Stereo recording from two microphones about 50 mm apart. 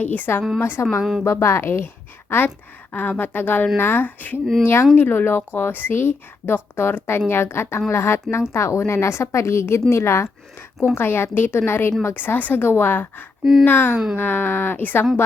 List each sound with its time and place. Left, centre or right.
0.0 s a woman's voice: left
0.6 s a woman's voice: left
1.2 s a woman's voice: left
2.9 s a woman's voice: left
4.6 s a woman's voice: left
4.9 s a woman's voice: left
10.9 s a woman's voice: left
12.2 s a woman's voice: left
13.4 s speech: centre
13.7 s a woman's voice: left